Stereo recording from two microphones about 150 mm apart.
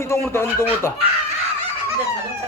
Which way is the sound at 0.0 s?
15° left (ahead or behind).